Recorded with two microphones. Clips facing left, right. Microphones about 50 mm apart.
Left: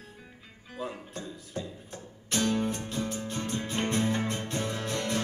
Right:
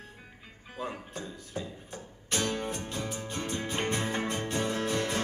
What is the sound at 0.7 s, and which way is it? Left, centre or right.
Speech, centre.